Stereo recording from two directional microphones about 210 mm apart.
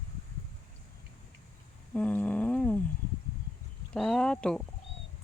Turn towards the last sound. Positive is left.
turn(degrees=5)  # may be behind; listen again after turning